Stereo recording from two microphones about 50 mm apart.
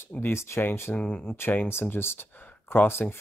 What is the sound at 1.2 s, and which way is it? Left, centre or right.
Speech, left.